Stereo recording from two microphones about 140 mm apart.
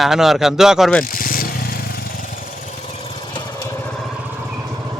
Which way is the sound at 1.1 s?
90° left.